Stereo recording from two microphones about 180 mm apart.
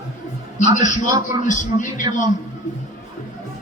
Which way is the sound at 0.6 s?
45° left (ahead or behind).